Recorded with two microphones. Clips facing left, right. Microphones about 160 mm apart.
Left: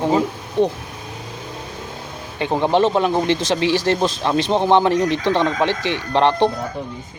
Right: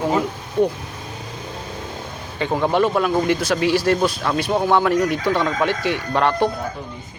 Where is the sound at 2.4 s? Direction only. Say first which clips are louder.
Left 2 dB; 20° left (ahead or behind).